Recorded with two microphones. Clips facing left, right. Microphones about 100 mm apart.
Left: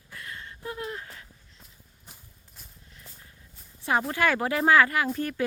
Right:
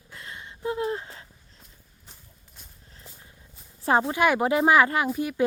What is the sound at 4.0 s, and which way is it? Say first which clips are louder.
Speech: right 3 dB; 15° right (ahead or behind).